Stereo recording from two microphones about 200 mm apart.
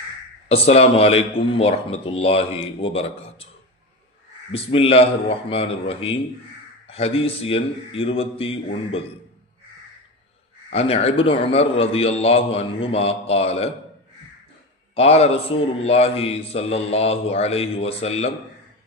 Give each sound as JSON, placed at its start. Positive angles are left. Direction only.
{"t": 0.4, "sound": "a man's voice", "side_deg": 30}
{"t": 4.5, "sound": "a man's voice", "side_deg": 30}
{"t": 10.7, "sound": "a man's voice", "side_deg": 30}
{"t": 14.9, "sound": "a man's voice", "side_deg": 30}